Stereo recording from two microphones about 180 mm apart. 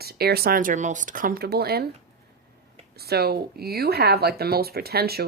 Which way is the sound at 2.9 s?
60° right (ahead or behind).